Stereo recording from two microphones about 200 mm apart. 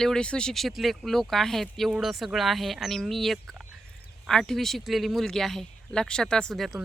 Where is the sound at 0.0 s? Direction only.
5° left (ahead or behind).